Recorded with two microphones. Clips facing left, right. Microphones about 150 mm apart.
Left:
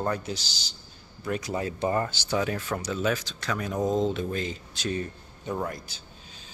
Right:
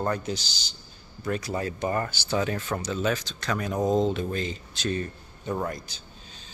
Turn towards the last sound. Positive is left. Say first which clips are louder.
# right 1 dB
turn(degrees=5)  # may be behind; listen again after turning